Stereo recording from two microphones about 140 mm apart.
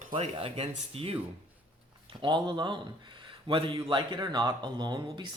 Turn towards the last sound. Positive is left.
turn(degrees=-30)  # may be behind; listen again after turning